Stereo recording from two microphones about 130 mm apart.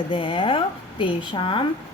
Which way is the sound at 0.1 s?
40° left (ahead or behind).